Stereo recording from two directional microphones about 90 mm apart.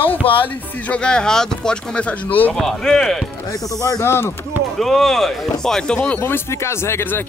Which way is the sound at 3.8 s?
40° left (ahead or behind).